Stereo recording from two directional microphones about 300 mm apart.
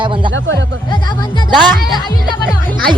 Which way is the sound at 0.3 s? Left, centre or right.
Right.